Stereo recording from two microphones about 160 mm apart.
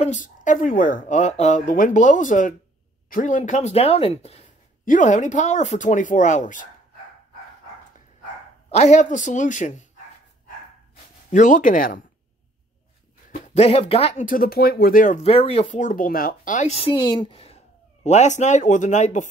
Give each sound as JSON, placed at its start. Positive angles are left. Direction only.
{"t": 0.0, "sound": "speech", "side_deg": 50}
{"t": 1.7, "sound": "speech", "side_deg": 55}
{"t": 4.8, "sound": "speech", "side_deg": 50}
{"t": 8.6, "sound": "speech", "side_deg": 45}
{"t": 11.3, "sound": "speech", "side_deg": 50}
{"t": 13.6, "sound": "speech", "side_deg": 40}
{"t": 14.2, "sound": "speech", "side_deg": 65}
{"t": 15.2, "sound": "speech", "side_deg": 35}
{"t": 15.7, "sound": "speech", "side_deg": 55}